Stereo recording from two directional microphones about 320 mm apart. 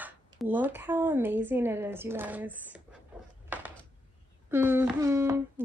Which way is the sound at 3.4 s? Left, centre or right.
Centre.